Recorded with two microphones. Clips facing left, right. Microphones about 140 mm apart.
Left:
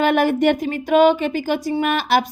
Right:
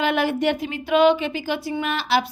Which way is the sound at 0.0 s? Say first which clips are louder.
Left 5 dB; 50° left (ahead or behind).